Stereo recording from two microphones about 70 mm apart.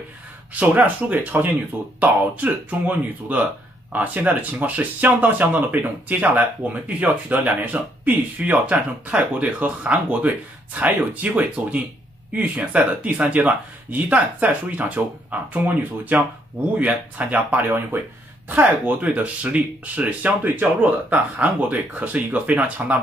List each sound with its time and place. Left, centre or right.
0.6 s speech: right